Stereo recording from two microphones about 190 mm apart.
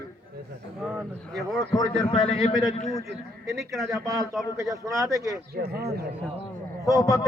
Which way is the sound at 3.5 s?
Centre (ahead or behind).